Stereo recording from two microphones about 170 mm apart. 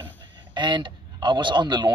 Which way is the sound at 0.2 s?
25° right (ahead or behind).